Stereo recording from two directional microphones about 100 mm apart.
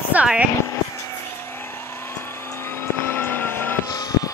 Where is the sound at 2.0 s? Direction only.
25° left (ahead or behind).